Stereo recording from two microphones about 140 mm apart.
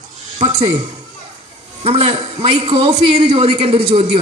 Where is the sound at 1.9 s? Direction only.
45° right (ahead or behind).